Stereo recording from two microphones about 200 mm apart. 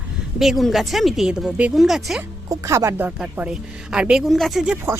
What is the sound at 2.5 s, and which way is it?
A woman's voice, 15° right (ahead or behind).